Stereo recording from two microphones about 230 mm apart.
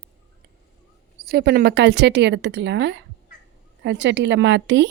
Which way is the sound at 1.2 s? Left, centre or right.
Right.